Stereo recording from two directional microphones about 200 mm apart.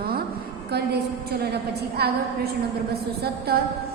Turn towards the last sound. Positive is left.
turn(degrees=-50)  # may be behind; listen again after turning